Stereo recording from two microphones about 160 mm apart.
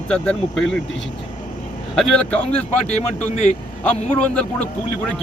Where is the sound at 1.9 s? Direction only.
5° left (ahead or behind).